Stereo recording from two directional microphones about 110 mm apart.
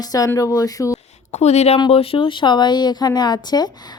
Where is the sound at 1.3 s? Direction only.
80° left.